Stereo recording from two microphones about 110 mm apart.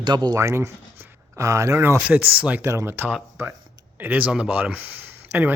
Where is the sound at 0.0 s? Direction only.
40° right (ahead or behind); by 2.0 s 25° right (ahead or behind).